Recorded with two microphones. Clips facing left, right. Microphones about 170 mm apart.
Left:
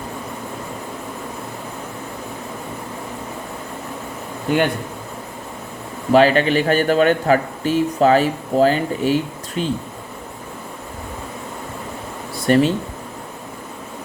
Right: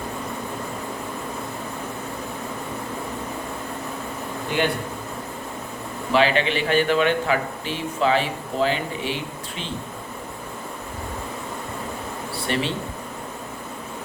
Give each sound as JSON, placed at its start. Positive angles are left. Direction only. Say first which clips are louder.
{"t": 6.1, "sound": "speech", "louder": "left 6 dB", "side_deg": 45}
{"t": 12.5, "sound": "speech", "louder": "left 11 dB", "side_deg": 45}